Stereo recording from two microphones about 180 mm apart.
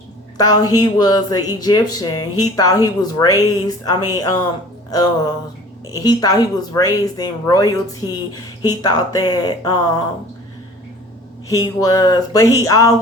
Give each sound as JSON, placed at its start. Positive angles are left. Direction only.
{"t": 0.3, "sound": "speech", "side_deg": 20}
{"t": 5.9, "sound": "speech", "side_deg": 20}
{"t": 11.4, "sound": "speech", "side_deg": 20}